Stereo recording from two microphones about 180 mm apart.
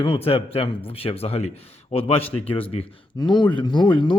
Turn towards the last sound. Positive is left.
turn(degrees=25)  # may be behind; listen again after turning